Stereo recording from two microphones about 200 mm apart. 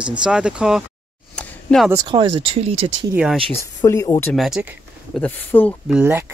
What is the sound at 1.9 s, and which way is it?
Speech, 20° right (ahead or behind).